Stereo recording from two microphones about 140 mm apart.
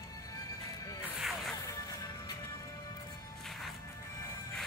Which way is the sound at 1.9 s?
25° left (ahead or behind).